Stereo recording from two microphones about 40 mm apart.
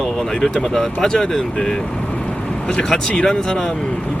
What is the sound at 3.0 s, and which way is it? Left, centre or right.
Speech, centre.